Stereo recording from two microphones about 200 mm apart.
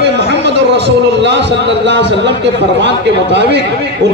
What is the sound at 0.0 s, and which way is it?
A man's voice, 60° right (ahead or behind).